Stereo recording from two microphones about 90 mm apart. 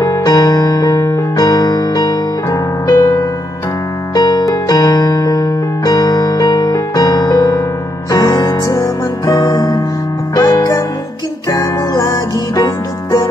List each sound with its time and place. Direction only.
0.0 s electric piano: 45° left (ahead or behind)
4.1 s keyboard: 50° left (ahead or behind)
4.6 s music: 50° left (ahead or behind)